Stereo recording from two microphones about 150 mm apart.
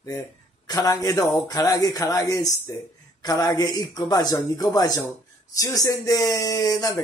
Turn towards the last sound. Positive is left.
turn(degrees=25)  # may be behind; listen again after turning